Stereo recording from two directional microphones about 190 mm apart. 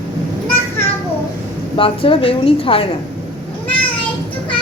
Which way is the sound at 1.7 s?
30° left (ahead or behind).